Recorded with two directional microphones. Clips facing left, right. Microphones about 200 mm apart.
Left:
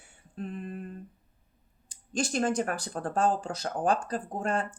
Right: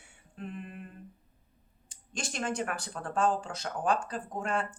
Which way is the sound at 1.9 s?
35° left (ahead or behind).